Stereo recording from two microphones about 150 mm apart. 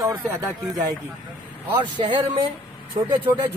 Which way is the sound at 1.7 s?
30° right (ahead or behind).